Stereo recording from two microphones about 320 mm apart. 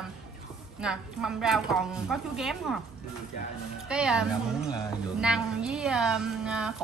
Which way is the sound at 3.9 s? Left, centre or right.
Centre.